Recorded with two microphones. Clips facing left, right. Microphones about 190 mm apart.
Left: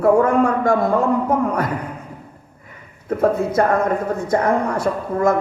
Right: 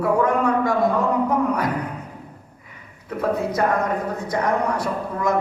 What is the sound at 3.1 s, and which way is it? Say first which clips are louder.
Speech: left 5 dB; 50° left (ahead or behind).